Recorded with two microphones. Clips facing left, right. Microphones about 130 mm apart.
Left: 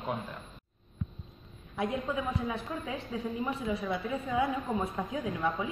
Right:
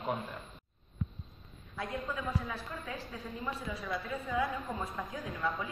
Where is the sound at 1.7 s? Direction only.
20° left (ahead or behind).